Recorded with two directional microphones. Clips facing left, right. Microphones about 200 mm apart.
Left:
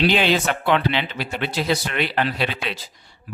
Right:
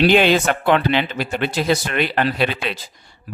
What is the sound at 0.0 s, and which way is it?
Speech, 50° right (ahead or behind).